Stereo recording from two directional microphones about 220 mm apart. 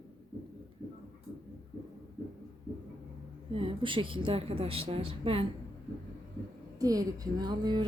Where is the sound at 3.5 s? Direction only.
25° right (ahead or behind).